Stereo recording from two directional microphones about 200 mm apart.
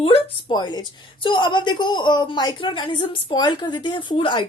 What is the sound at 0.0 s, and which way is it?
A woman's voice, 25° left (ahead or behind).